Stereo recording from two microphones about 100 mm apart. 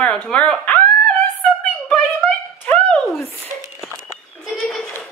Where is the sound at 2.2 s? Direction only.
15° left (ahead or behind).